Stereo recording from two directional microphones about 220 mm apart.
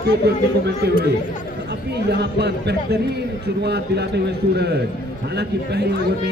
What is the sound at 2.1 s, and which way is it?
Speech, 50° right (ahead or behind).